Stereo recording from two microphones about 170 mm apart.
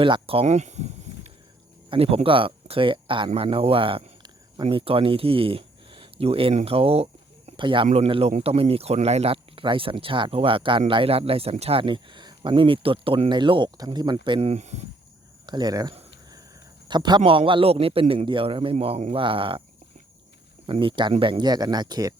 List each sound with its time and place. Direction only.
0.0 s speech: 30° right (ahead or behind)
14.3 s speech: 35° right (ahead or behind)
15.4 s speech: 25° right (ahead or behind)
20.7 s speech: 30° right (ahead or behind)